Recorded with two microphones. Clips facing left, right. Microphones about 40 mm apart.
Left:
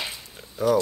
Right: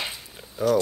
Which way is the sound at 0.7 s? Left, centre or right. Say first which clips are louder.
Even; centre.